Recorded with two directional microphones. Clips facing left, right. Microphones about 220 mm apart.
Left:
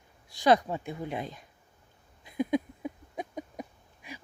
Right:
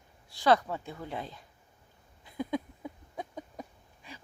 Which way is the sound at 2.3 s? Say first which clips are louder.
Left 5 dB; 15° left (ahead or behind).